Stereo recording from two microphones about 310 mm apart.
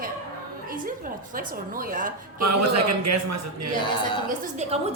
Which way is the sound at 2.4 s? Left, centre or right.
Right.